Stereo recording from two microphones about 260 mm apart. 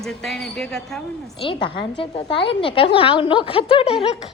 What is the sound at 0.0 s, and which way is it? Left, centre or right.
A woman's voice, centre.